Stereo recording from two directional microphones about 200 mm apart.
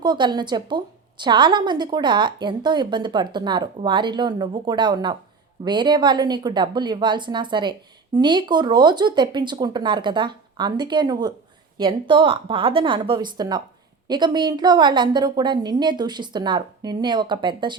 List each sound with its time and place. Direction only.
0.0 s a woman's voice: 20° right (ahead or behind)